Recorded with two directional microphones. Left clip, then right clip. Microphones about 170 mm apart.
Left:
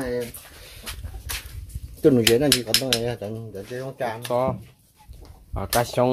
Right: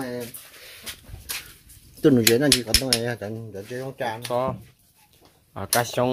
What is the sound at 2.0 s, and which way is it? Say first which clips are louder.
Speech: left 1 dB; 35° right (ahead or behind).